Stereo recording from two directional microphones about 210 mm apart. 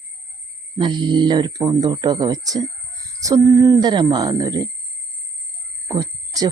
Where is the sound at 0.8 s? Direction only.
20° right (ahead or behind).